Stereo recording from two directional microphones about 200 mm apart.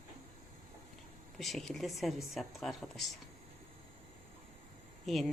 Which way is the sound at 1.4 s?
Centre (ahead or behind).